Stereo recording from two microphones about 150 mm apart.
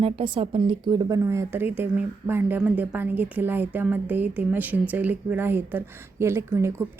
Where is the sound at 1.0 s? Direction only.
20° right (ahead or behind).